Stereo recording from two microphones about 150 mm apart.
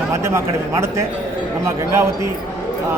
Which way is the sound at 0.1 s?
20° right (ahead or behind).